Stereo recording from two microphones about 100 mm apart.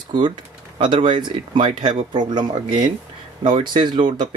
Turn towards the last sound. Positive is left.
turn(degrees=-50)  # may be behind; listen again after turning